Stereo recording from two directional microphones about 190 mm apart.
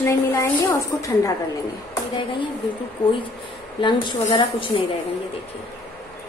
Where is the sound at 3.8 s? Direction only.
25° left (ahead or behind).